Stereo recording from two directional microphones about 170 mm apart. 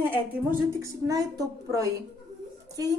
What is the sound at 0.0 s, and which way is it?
A woman's voice, 10° right (ahead or behind).